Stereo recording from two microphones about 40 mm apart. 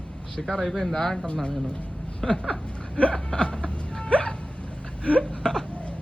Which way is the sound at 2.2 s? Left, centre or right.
Centre.